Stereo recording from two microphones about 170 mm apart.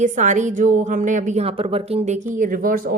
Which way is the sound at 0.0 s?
45° right (ahead or behind).